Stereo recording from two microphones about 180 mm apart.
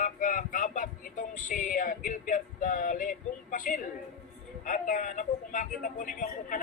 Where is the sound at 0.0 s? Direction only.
45° left (ahead or behind).